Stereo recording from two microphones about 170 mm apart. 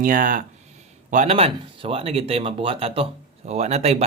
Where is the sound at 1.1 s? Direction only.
40° right (ahead or behind).